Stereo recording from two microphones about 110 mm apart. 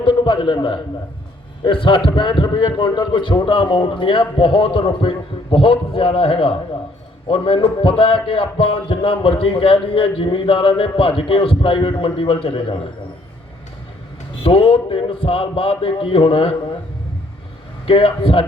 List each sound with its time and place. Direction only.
0.0 s a man's voice: 55° left (ahead or behind)
14.4 s a man's voice: 60° left (ahead or behind)
17.8 s a man's voice: 55° left (ahead or behind)